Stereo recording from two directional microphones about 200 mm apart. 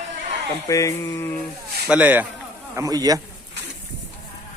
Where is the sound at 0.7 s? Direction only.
15° left (ahead or behind).